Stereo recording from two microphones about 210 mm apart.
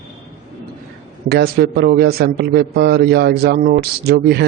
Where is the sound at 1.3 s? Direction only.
50° right (ahead or behind).